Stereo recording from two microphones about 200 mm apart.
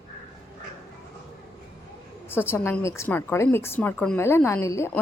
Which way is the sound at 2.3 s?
10° left (ahead or behind).